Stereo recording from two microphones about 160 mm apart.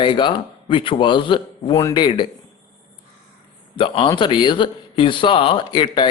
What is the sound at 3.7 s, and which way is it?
A man's voice, 30° left (ahead or behind).